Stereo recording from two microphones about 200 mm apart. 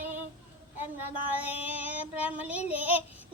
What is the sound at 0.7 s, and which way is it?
Child singing, 10° right (ahead or behind).